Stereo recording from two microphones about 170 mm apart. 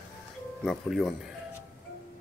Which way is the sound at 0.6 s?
Centre (ahead or behind).